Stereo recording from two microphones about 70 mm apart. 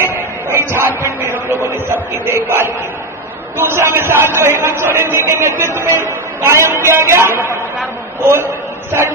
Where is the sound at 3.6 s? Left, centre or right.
Right.